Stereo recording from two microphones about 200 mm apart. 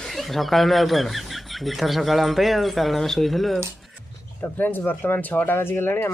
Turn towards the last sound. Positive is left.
turn(degrees=10)  # may be behind; listen again after turning